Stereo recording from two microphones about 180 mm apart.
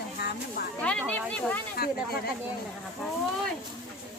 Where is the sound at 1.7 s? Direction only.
60° left (ahead or behind).